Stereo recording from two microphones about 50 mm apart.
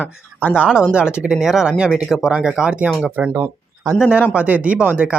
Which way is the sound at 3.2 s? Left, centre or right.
Right.